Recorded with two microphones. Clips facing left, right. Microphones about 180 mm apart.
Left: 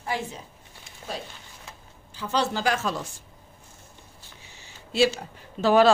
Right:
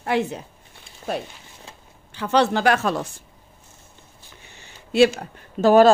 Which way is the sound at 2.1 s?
65° right (ahead or behind).